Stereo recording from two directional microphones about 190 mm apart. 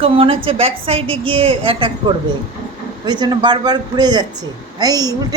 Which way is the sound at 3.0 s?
25° right (ahead or behind).